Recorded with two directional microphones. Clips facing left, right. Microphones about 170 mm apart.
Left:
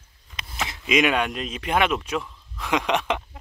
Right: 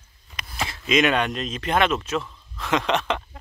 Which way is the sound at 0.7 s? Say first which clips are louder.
Right 1 dB; 10° left (ahead or behind).